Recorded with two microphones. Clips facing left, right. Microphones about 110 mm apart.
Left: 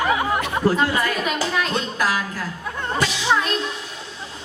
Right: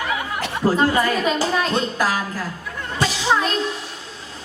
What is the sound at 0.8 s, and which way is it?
A woman's voice, 35° right (ahead or behind).